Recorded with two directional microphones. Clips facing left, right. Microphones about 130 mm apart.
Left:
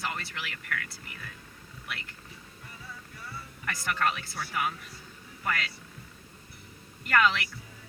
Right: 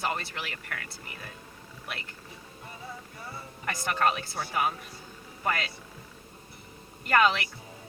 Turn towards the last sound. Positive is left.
turn(degrees=-30)  # may be behind; listen again after turning